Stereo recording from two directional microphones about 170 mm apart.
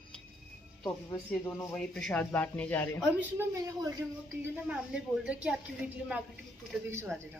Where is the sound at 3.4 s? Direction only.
20° right (ahead or behind).